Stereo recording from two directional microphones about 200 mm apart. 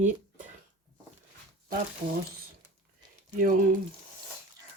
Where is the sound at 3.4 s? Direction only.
40° right (ahead or behind).